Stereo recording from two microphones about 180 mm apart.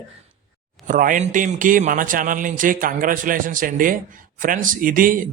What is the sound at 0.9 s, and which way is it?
A man's voice, 45° right (ahead or behind).